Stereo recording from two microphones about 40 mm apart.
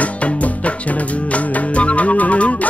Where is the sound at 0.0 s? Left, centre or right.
Left.